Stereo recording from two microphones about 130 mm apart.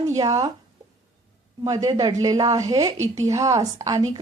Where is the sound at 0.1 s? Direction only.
25° right (ahead or behind).